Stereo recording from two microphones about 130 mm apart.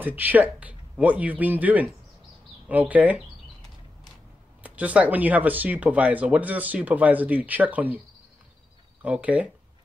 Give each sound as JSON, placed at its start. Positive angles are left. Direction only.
{"t": 0.0, "sound": "speech", "side_deg": -15}
{"t": 4.6, "sound": "speech", "side_deg": -10}
{"t": 9.0, "sound": "speech", "side_deg": -10}